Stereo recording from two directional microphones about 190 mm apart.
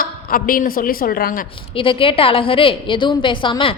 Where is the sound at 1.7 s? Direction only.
30° left (ahead or behind).